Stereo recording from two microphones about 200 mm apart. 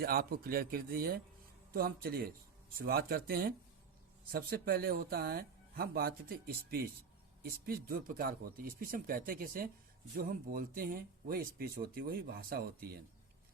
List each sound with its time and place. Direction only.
0.0 s speech: 50° right (ahead or behind)